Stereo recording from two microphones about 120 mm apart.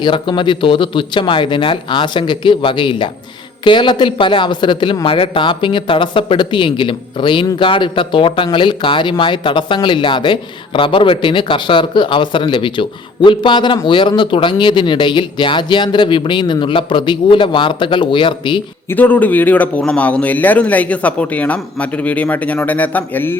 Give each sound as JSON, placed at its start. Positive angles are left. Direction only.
{"t": 0.0, "sound": "a woman's voice", "side_deg": 40}
{"t": 18.9, "sound": "a man's voice", "side_deg": 15}